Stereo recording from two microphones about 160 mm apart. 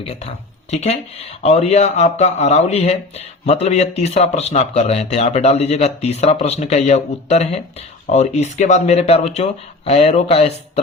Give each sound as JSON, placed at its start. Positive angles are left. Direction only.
{"t": 0.7, "sound": "speech", "side_deg": 45}